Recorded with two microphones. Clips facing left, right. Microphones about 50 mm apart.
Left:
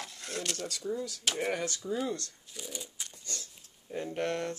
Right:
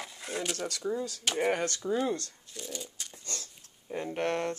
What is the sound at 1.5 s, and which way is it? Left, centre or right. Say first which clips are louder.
Speech: right 4 dB; right.